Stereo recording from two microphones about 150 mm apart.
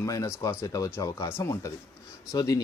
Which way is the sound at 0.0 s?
20° left (ahead or behind).